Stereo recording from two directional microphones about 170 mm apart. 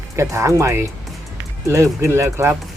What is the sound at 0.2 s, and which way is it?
Speech, 15° right (ahead or behind).